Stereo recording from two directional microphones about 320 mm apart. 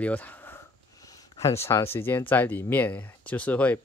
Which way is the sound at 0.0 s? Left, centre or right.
Centre.